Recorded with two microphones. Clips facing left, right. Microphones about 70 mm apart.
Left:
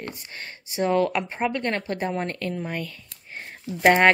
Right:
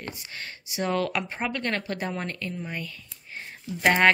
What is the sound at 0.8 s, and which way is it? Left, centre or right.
Speech, left.